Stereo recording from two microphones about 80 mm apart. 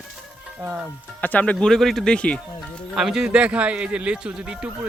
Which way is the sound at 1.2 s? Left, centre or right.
Centre.